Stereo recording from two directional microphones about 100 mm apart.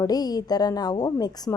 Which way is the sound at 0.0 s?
40° left (ahead or behind).